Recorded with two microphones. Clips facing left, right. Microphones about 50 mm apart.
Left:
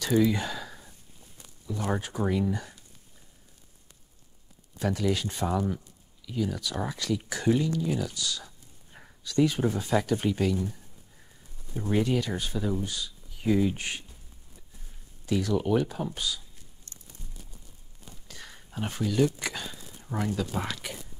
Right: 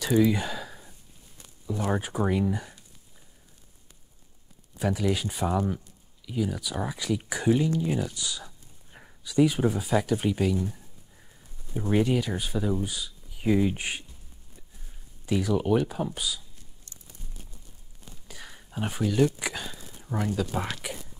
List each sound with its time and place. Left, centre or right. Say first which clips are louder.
0.0 s gasp: right 1 dB; centre
1.9 s speech: right 2 dB; centre
4.7 s speech: right 1 dB; centre
15.2 s speech: right 1 dB; centre
17.2 s a sound: left 1 dB; right
18.3 s speech: right 2 dB; centre